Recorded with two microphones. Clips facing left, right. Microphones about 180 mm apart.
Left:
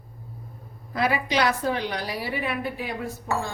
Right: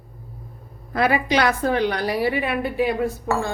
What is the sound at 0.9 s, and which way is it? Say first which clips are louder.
A woman's voice: right 5 dB; 60° right (ahead or behind).